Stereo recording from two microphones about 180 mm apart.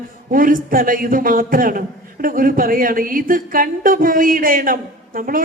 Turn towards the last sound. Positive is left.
turn(degrees=-50)  # may be behind; listen again after turning